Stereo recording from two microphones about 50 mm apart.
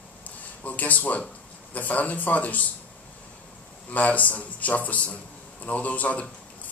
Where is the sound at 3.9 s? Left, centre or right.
Left.